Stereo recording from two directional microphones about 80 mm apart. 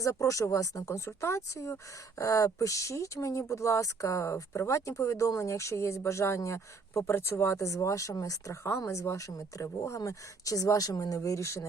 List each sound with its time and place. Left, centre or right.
0.0 s speech: left